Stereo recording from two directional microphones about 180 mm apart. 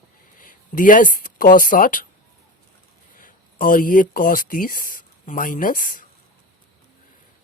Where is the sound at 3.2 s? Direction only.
50° left (ahead or behind).